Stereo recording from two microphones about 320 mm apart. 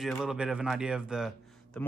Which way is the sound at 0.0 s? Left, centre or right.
Centre.